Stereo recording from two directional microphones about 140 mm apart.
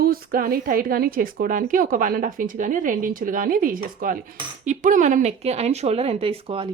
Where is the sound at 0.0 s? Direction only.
90° right.